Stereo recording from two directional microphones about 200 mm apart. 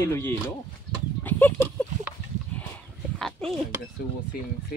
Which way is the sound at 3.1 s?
Centre (ahead or behind).